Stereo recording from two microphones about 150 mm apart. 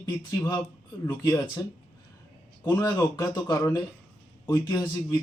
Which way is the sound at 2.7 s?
20° left (ahead or behind).